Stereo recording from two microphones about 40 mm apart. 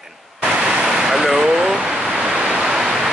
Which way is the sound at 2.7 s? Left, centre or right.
Centre.